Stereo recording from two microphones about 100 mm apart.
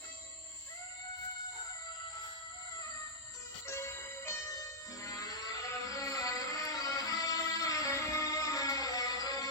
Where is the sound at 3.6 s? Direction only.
25° left (ahead or behind).